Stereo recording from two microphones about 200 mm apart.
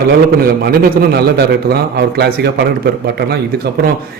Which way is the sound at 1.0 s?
55° right (ahead or behind).